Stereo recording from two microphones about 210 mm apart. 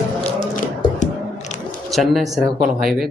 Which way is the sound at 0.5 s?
35° left (ahead or behind).